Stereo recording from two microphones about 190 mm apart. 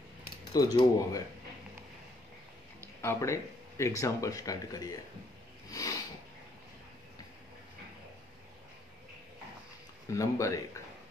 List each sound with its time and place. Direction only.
0.5 s speech: 20° left (ahead or behind)
2.8 s speech: 15° left (ahead or behind)
5.7 s sniff: 20° left (ahead or behind)
10.1 s speech: 15° left (ahead or behind)